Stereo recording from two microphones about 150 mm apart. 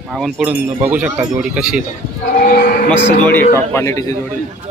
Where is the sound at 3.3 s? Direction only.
15° left (ahead or behind).